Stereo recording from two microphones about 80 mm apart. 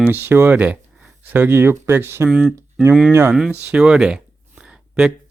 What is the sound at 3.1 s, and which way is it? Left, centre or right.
Speech, right.